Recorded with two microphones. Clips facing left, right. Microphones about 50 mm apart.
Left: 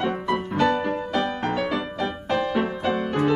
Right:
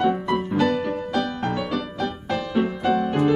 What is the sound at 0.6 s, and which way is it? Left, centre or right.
Music, left.